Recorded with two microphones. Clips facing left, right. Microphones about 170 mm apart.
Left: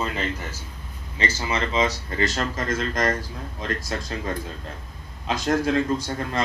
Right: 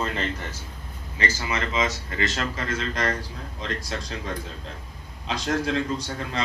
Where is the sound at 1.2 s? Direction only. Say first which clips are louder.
Left 2 dB; 25° left (ahead or behind); by 4.1 s 45° left (ahead or behind).